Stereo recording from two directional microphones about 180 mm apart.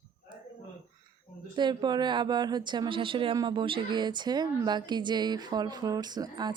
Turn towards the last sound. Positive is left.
turn(degrees=-20)  # may be behind; listen again after turning